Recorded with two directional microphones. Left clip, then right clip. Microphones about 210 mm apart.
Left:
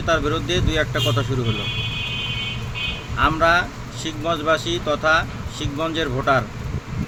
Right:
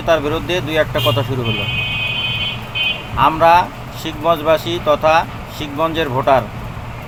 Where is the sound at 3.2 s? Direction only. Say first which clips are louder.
Right 6 dB; 15° left (ahead or behind).